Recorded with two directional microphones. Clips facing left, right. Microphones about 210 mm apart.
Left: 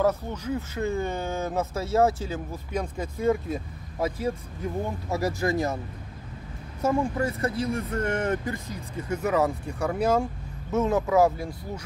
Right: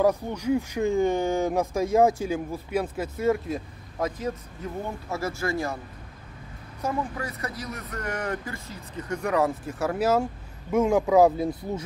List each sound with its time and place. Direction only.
0.0 s speech: 15° right (ahead or behind); by 4.3 s 5° left (ahead or behind)
5.1 s speech: 15° left (ahead or behind)
6.8 s speech: 25° left (ahead or behind)
8.9 s speech: 5° left (ahead or behind); by 11.8 s 20° right (ahead or behind)